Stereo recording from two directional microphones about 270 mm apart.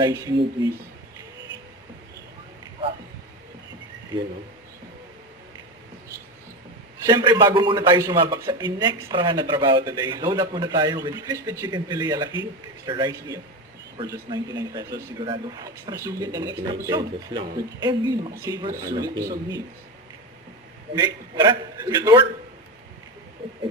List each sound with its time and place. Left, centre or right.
0.0 s a man's voice: centre
7.0 s a man's voice: centre
21.0 s a man's voice: centre